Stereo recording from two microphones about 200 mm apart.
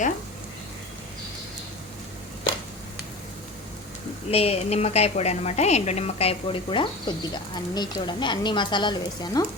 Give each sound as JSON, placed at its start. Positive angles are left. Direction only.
{"t": 4.3, "sound": "a woman's voice", "side_deg": 30}